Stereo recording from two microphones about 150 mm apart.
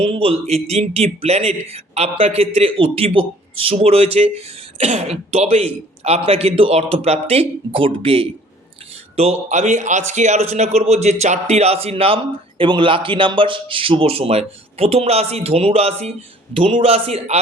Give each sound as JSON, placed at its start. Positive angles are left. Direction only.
{"t": 0.0, "sound": "a man's voice", "side_deg": -40}